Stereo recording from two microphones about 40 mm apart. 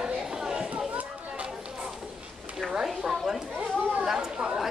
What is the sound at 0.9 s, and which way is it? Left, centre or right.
Chatter, right.